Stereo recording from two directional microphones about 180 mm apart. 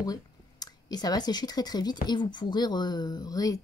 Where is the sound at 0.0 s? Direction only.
20° left (ahead or behind).